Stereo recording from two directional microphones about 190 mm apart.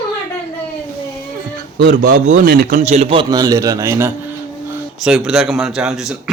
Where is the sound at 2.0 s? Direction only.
45° right (ahead or behind).